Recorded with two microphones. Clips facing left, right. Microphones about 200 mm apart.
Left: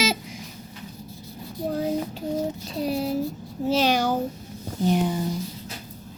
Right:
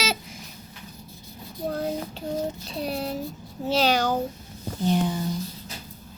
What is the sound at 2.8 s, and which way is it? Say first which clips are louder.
A child's voice: left 5 dB; 10° left (ahead or behind).